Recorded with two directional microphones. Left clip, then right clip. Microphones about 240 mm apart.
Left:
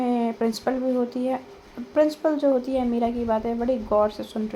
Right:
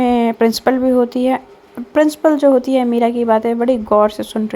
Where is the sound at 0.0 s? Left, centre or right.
Right.